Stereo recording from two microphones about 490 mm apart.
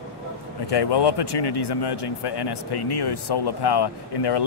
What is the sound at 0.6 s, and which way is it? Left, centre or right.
Speech, left.